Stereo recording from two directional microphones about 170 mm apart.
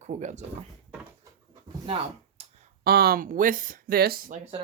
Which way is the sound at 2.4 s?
35° right (ahead or behind).